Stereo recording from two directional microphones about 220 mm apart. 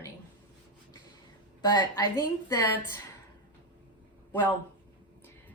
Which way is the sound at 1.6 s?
20° left (ahead or behind).